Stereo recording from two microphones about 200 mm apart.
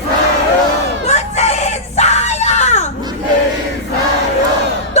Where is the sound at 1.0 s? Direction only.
35° left (ahead or behind).